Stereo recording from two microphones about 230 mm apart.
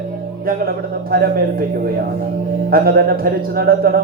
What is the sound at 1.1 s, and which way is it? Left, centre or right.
Speech, right.